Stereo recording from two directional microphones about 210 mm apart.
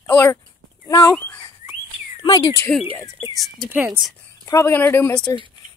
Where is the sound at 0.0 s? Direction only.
10° left (ahead or behind).